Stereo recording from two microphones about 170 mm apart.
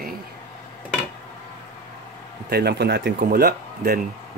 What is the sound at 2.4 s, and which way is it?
Speech, 70° right (ahead or behind).